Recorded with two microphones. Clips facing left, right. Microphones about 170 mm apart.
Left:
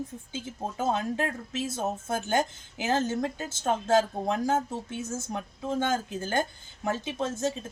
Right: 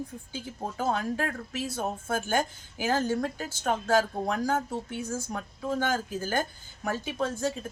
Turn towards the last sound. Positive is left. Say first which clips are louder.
# even
turn(degrees=20)  # may be behind; listen again after turning